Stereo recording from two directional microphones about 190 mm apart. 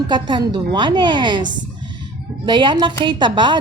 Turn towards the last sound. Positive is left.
turn(degrees=-25)  # may be behind; listen again after turning